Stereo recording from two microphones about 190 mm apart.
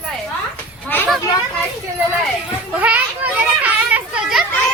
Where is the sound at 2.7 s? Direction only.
5° right (ahead or behind).